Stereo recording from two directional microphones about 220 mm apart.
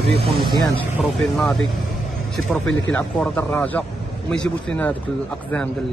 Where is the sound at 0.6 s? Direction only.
Centre (ahead or behind).